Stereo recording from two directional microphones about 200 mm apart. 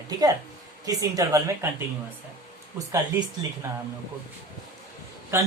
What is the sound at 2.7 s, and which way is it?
Speech, 15° right (ahead or behind).